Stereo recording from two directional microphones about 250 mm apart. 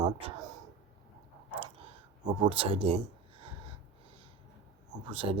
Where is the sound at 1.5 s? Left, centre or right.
Right.